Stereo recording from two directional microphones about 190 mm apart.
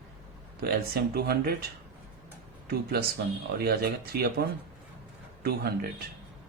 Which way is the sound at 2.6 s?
55° right (ahead or behind).